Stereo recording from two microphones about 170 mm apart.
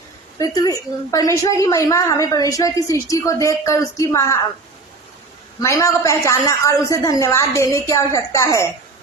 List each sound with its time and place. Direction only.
0.3 s a woman's voice: 20° left (ahead or behind)
5.5 s a woman's voice: 20° left (ahead or behind)